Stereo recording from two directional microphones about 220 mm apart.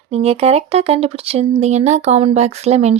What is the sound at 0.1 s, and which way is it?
Speech, 30° right (ahead or behind).